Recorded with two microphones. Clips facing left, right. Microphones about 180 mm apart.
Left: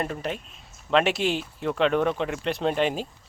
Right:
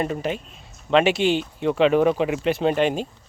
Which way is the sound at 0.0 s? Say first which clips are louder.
Right 5 dB; centre (ahead or behind).